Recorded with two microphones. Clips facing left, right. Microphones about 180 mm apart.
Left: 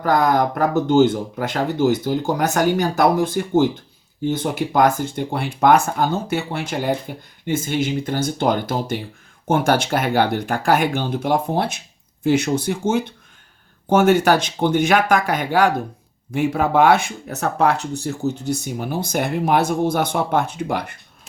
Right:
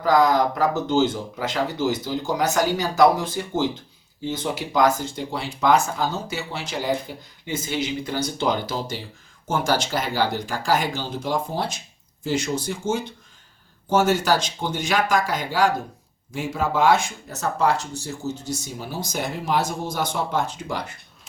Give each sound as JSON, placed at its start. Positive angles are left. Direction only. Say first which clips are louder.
{"t": 0.0, "sound": "speech", "louder": "left 1 dB", "side_deg": 55}